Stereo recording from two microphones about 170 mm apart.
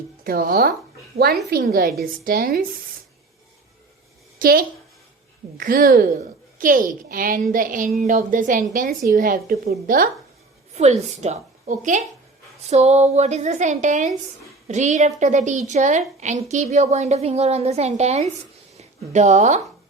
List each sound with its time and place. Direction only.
0.3 s a woman's voice: 60° right (ahead or behind)
4.4 s a woman's voice: 55° right (ahead or behind)
10.8 s a woman's voice: 40° right (ahead or behind)